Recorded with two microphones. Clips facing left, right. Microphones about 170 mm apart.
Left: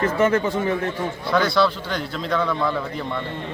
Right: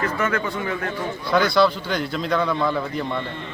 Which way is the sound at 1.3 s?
Centre (ahead or behind).